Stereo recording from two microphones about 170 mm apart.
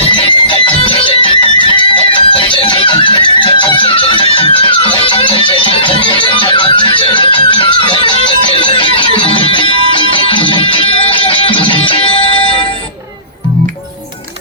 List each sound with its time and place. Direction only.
0.2 s music: 30° left (ahead or behind)